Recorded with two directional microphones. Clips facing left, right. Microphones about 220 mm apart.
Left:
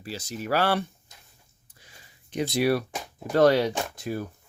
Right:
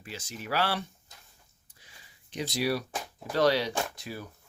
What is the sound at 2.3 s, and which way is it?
Speech, 55° left (ahead or behind).